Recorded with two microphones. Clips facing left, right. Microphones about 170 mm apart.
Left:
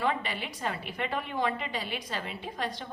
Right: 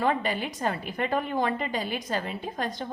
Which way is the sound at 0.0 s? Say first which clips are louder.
Right 5 dB; 45° right (ahead or behind).